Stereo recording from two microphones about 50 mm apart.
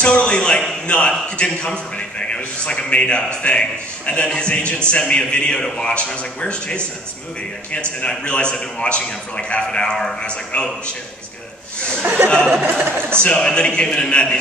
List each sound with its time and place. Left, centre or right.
0.0 s a sound: left
0.8 s a man's voice: left
8.1 s a man's voice: centre
12.0 s chatter: right
12.6 s speech: right
13.2 s a man's voice: centre